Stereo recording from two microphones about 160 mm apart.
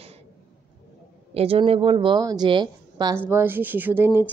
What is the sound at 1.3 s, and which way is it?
A woman's voice, 35° right (ahead or behind).